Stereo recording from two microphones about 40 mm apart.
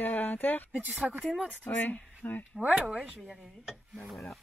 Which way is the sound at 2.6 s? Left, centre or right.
Right.